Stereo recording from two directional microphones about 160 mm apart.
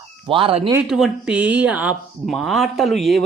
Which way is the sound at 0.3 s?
35° right (ahead or behind).